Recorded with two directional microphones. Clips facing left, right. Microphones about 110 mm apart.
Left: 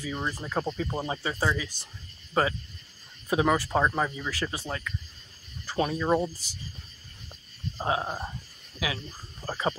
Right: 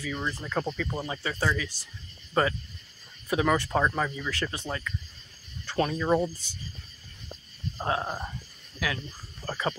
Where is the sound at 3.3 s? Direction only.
20° left (ahead or behind).